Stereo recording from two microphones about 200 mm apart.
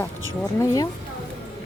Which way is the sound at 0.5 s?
15° left (ahead or behind).